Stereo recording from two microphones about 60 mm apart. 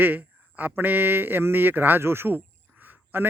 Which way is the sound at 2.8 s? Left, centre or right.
Right.